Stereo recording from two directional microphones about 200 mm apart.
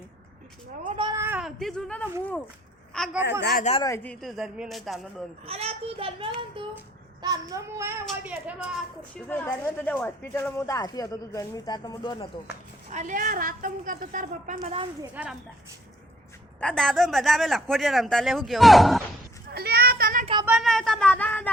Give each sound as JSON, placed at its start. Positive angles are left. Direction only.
{"t": 0.9, "sound": "a sound", "side_deg": -20}
{"t": 1.2, "sound": "a woman's voice", "side_deg": -5}
{"t": 3.6, "sound": "speech", "side_deg": 30}
{"t": 3.8, "sound": "speech", "side_deg": 10}
{"t": 5.5, "sound": "a child's voice", "side_deg": -30}
{"t": 7.2, "sound": "child singing", "side_deg": -20}
{"t": 9.1, "sound": "speech", "side_deg": 10}
{"t": 12.9, "sound": "a woman's voice", "side_deg": -40}
{"t": 15.1, "sound": "child singing", "side_deg": -5}
{"t": 16.6, "sound": "speech", "side_deg": 5}
{"t": 19.5, "sound": "children playing", "side_deg": -50}
{"t": 20.4, "sound": "speech", "side_deg": -5}